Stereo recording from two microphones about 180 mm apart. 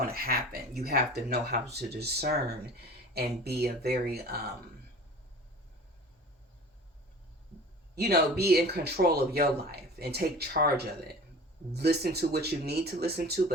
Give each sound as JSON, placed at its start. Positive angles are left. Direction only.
{"t": 0.0, "sound": "speech", "side_deg": -55}
{"t": 7.9, "sound": "speech", "side_deg": -60}